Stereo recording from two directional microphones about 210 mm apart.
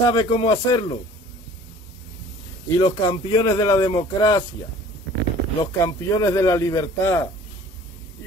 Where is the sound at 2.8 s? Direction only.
20° left (ahead or behind).